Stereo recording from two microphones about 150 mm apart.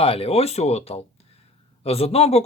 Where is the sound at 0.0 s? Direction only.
40° left (ahead or behind).